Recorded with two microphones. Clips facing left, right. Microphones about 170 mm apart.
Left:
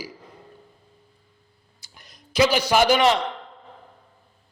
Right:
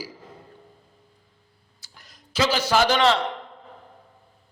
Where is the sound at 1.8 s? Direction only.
15° left (ahead or behind).